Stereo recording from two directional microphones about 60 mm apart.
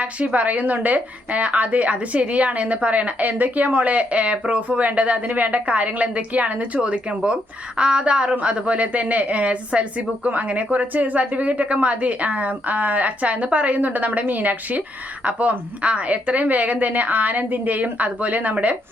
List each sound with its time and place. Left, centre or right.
0.0 s a woman's voice: right